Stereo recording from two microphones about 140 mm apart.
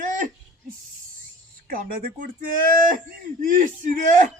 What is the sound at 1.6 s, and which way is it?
Speech, 90° right.